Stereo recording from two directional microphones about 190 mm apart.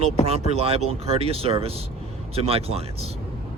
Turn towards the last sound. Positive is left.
turn(degrees=-30)  # may be behind; listen again after turning